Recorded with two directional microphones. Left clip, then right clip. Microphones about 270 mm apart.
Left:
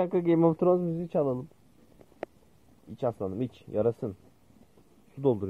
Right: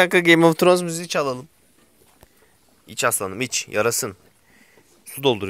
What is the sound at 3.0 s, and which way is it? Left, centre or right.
Speech, right.